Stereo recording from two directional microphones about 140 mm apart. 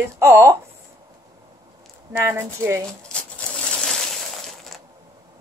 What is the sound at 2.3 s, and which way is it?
Speech, 20° right (ahead or behind).